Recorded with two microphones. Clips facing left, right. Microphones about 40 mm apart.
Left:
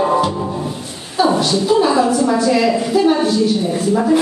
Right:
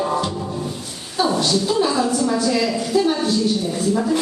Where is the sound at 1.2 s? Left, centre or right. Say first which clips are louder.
Left 4 dB; centre.